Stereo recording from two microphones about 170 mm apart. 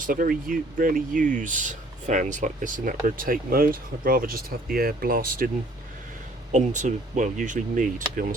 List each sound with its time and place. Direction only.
0.0 s speech: 55° right (ahead or behind)
6.5 s speech: 45° right (ahead or behind)